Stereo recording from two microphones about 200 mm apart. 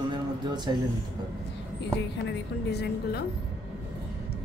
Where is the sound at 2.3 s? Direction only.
55° left (ahead or behind).